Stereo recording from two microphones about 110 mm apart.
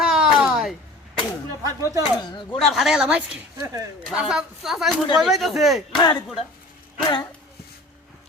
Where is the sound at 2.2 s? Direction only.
45° left (ahead or behind).